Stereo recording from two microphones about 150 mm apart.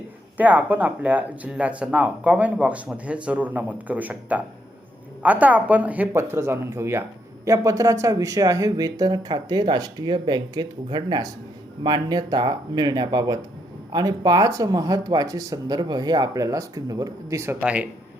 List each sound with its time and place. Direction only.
0.3 s speech: 10° right (ahead or behind)